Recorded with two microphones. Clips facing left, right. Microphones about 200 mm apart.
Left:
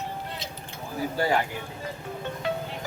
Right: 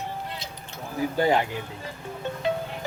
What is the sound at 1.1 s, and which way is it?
Speech, 20° right (ahead or behind).